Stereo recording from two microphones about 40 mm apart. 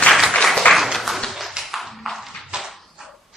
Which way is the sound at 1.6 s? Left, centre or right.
Centre.